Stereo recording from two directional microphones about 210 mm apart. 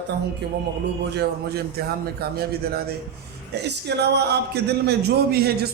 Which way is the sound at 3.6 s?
55° right (ahead or behind).